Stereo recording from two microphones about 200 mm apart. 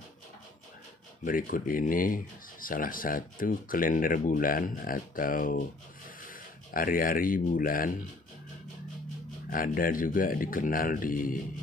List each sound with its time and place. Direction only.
1.2 s speech: 45° left (ahead or behind)
6.7 s speech: 45° left (ahead or behind)
9.5 s speech: 45° left (ahead or behind)